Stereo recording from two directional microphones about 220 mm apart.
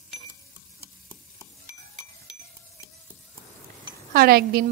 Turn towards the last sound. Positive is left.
turn(degrees=-45)  # may be behind; listen again after turning